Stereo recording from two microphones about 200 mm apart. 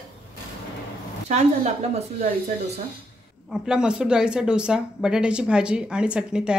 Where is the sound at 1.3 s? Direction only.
35° right (ahead or behind).